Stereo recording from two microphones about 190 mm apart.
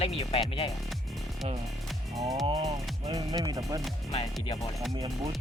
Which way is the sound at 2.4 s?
25° right (ahead or behind).